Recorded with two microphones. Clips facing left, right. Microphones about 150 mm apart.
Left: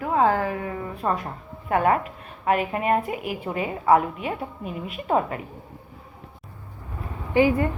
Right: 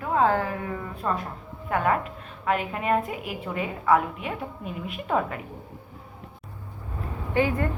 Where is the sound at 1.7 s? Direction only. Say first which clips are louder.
Left 3 dB; 40° left (ahead or behind).